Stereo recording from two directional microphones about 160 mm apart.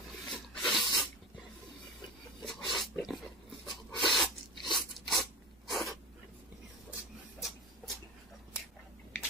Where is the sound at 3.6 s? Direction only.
Centre (ahead or behind).